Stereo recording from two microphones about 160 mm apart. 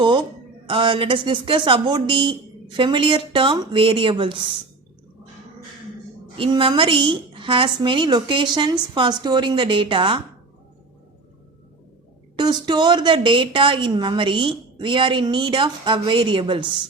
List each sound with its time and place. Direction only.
0.0 s a sound: 30° right (ahead or behind)
0.7 s a woman's voice: 35° right (ahead or behind)
6.3 s a woman's voice: 35° right (ahead or behind)
12.4 s a woman's voice: 30° right (ahead or behind)